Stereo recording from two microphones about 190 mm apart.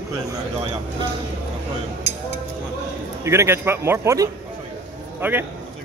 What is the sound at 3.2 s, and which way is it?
A man's voice, 15° right (ahead or behind).